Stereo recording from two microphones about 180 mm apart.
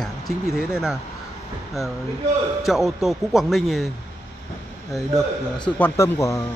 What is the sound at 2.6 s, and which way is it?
Speech, centre (ahead or behind).